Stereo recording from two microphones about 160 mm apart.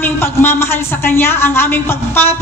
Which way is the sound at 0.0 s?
15° left (ahead or behind).